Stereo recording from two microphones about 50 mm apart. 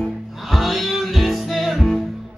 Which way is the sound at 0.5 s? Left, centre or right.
Centre.